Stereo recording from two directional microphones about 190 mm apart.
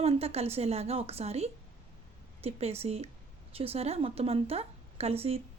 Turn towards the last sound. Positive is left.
turn(degrees=-30)  # may be behind; listen again after turning